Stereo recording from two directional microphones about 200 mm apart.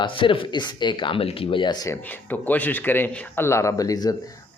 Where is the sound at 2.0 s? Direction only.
10° left (ahead or behind).